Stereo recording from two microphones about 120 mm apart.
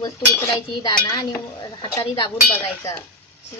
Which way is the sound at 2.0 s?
45° left (ahead or behind).